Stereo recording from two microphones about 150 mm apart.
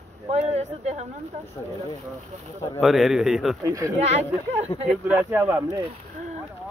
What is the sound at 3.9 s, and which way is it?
Speech, 45° right (ahead or behind).